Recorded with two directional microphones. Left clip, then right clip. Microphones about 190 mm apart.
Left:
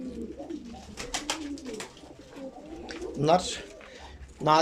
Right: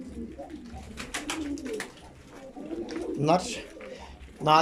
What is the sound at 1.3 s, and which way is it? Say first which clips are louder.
Bird: even; 20° left (ahead or behind).